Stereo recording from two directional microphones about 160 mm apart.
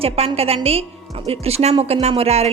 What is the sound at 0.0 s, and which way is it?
Speech, 40° right (ahead or behind).